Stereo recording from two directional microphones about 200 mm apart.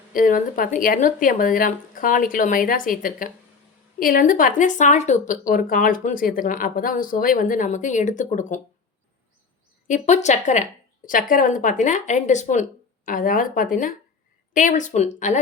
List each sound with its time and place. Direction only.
0.1 s speech: 45° left (ahead or behind)
9.8 s speech: 40° left (ahead or behind)